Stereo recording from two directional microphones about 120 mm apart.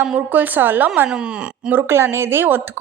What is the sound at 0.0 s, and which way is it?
A woman's voice, 15° right (ahead or behind).